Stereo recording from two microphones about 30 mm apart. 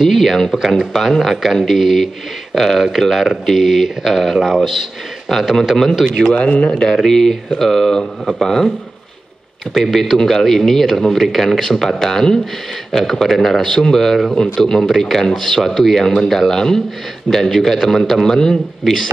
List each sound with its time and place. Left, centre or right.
0.0 s a man's voice: centre
5.6 s a man's voice: centre
6.0 s speech: centre
7.0 s speech: centre
9.8 s a man's voice: centre